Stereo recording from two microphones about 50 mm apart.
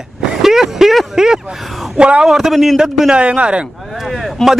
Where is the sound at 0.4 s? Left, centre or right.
Centre.